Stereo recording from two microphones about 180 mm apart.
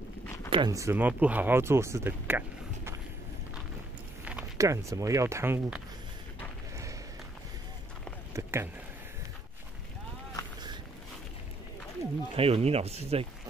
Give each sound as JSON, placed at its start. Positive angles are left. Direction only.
{"t": 0.5, "sound": "speech", "side_deg": -25}
{"t": 4.2, "sound": "speech", "side_deg": -5}
{"t": 8.3, "sound": "a sound", "side_deg": -15}
{"t": 12.4, "sound": "speech", "side_deg": -30}